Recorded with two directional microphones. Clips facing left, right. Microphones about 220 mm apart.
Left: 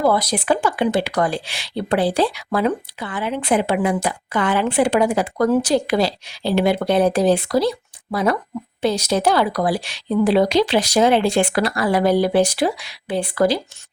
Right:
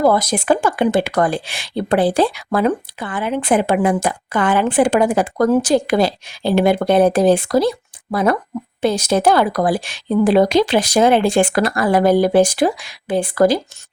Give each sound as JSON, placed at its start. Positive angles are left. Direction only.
{"t": 0.0, "sound": "speech", "side_deg": -45}